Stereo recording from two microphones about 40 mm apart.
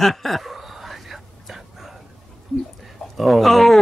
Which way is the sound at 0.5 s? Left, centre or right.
Centre.